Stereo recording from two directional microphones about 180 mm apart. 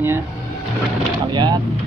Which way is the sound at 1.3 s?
25° right (ahead or behind).